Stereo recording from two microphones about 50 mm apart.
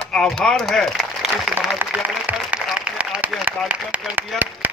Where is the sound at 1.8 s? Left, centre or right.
Right.